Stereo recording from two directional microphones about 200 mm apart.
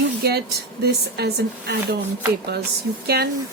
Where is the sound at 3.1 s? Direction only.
55° right (ahead or behind).